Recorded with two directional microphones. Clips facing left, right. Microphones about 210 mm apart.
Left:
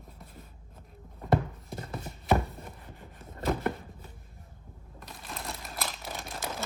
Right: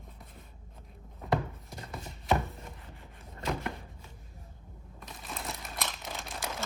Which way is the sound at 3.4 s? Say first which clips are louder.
Left 5 dB; 50° left (ahead or behind).